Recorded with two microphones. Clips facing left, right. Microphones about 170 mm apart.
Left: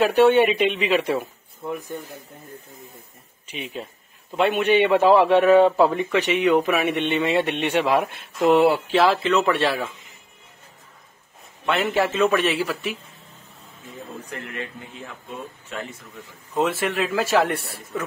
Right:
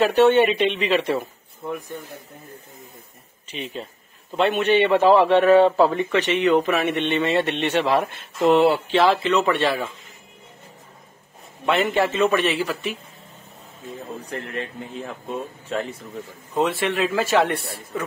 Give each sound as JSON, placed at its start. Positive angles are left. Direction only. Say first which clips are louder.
{"t": 0.0, "sound": "speech", "louder": "even", "side_deg": 10}
{"t": 3.4, "sound": "a man's voice", "louder": "right 1 dB", "side_deg": 10}
{"t": 11.6, "sound": "a man's voice", "louder": "right 1 dB", "side_deg": 0}
{"t": 14.2, "sound": "speech", "louder": "right 3 dB", "side_deg": -35}
{"t": 16.5, "sound": "a man's voice", "louder": "right 1 dB", "side_deg": 0}